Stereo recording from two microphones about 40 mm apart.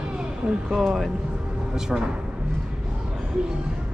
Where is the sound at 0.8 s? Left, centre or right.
Centre.